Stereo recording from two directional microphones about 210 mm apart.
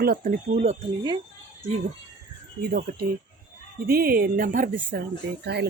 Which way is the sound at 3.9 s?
45° right (ahead or behind).